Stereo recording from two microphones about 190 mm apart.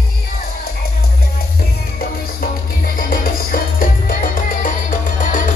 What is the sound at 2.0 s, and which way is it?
Music, 50° left (ahead or behind).